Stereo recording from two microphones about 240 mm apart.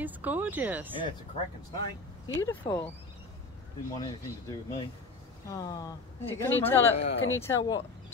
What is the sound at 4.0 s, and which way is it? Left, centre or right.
Speech, centre.